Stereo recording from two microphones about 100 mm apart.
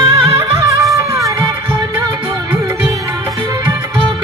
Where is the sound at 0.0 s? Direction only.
30° right (ahead or behind).